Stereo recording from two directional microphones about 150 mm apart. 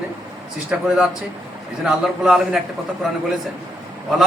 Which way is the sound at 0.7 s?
5° right (ahead or behind).